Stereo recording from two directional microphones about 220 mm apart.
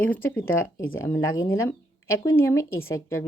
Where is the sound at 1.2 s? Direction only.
65° left (ahead or behind).